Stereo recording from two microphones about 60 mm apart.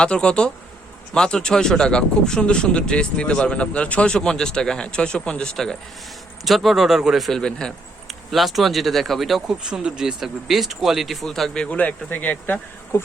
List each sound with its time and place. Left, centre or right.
0.0 s speech: centre
6.4 s speech: centre
9.6 s speech: centre
11.6 s speech: left
12.9 s speech: left